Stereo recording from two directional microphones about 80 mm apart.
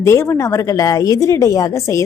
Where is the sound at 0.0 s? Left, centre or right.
Left.